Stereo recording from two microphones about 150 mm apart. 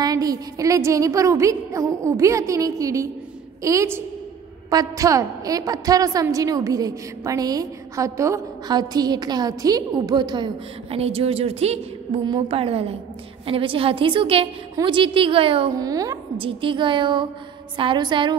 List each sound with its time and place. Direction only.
0.0 s a woman's voice: 25° right (ahead or behind)
15.7 s a woman's voice: 25° right (ahead or behind)
16.3 s a woman's voice: 35° right (ahead or behind)